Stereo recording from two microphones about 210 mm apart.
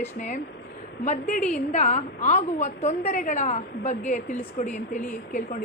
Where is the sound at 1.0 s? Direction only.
35° left (ahead or behind).